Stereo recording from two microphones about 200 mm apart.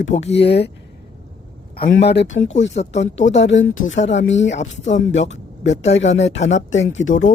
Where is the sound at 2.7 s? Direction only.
35° left (ahead or behind).